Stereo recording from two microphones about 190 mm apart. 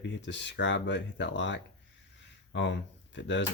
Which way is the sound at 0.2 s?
70° left (ahead or behind).